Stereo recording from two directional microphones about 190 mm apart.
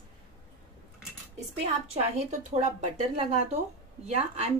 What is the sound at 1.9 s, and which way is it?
A woman's voice, 35° right (ahead or behind).